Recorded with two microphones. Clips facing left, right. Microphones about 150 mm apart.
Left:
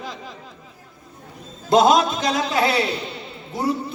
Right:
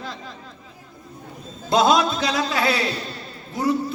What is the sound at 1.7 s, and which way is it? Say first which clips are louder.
Speech: left 2 dB; 45° left (ahead or behind).